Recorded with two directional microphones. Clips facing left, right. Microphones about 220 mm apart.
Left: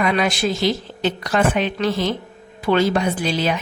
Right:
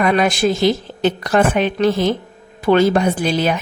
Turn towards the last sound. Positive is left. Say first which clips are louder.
# right 3 dB
turn(degrees=-50)  # may be behind; listen again after turning